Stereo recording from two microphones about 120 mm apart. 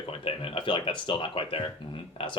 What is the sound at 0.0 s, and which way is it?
Speech, 50° left (ahead or behind).